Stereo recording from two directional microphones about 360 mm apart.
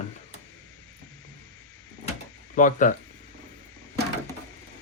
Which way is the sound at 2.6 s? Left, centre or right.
Left.